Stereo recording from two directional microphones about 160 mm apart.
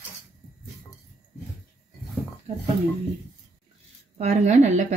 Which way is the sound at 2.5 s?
45° right (ahead or behind).